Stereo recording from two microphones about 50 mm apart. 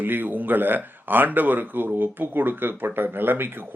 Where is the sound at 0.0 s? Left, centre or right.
Right.